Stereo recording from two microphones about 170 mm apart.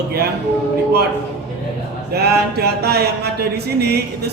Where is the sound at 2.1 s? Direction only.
70° right (ahead or behind).